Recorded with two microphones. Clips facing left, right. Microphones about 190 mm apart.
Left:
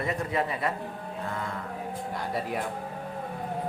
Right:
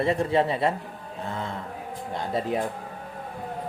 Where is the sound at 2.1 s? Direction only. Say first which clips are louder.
Right 6 dB; 25° right (ahead or behind).